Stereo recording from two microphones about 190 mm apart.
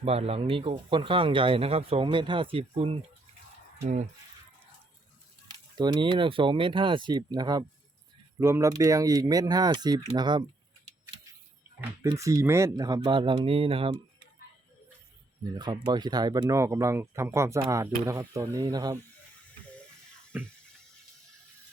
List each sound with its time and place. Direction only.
0.0 s speech: 30° right (ahead or behind)
5.5 s speech: 20° right (ahead or behind)
12.0 s speech: 15° right (ahead or behind)
15.5 s speech: 20° right (ahead or behind)
20.3 s speech: 10° right (ahead or behind)